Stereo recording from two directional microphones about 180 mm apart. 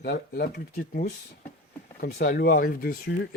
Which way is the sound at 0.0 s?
60° left (ahead or behind).